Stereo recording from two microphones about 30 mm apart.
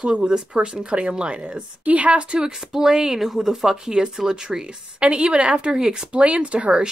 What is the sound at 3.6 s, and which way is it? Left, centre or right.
Speech, right.